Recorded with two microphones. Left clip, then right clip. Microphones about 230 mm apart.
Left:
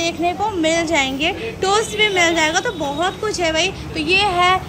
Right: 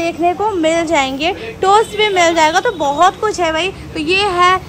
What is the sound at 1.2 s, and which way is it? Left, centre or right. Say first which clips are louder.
Speech: right 3 dB; centre.